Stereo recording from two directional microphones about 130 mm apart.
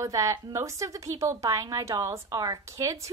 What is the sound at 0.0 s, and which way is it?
A woman's voice, 25° right (ahead or behind).